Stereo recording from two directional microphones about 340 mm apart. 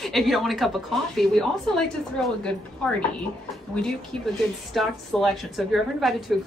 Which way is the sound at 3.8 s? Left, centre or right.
Centre.